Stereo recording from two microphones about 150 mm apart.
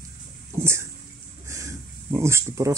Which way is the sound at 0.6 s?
20° right (ahead or behind).